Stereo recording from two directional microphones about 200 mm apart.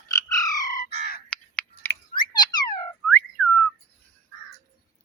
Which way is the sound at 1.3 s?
5° left (ahead or behind).